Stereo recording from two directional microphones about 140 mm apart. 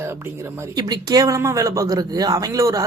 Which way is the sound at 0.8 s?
30° right (ahead or behind).